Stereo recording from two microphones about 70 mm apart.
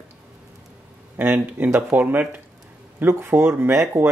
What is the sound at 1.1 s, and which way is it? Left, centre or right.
Speech, right.